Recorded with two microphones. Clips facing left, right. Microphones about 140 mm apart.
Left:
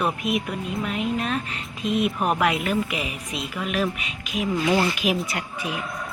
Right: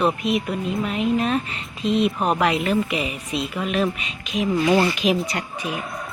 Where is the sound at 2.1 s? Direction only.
25° right (ahead or behind).